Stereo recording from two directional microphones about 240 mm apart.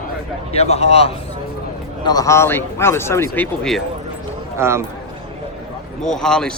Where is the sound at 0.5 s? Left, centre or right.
Left.